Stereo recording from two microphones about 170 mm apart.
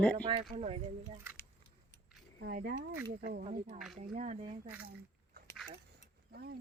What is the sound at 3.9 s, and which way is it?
Speech, 50° right (ahead or behind).